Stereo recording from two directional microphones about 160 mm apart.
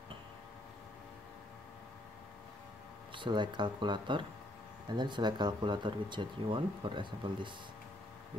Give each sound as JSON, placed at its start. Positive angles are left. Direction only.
{"t": 3.2, "sound": "speech", "side_deg": -30}